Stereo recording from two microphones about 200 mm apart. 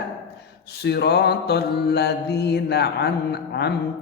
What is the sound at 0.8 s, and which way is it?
Mantra, 55° left (ahead or behind).